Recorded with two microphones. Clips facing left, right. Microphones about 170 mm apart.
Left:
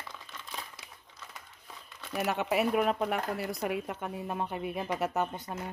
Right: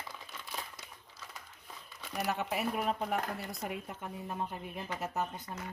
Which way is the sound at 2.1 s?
85° left.